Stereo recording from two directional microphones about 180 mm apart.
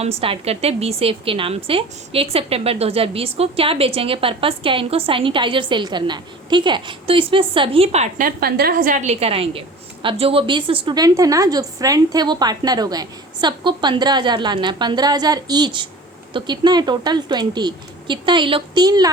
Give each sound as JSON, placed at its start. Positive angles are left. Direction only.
{"t": 0.0, "sound": "a woman's voice", "side_deg": -35}
{"t": 8.4, "sound": "a woman's voice", "side_deg": -60}